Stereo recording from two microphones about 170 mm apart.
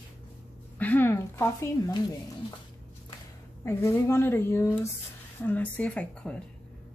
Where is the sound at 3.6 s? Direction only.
15° left (ahead or behind).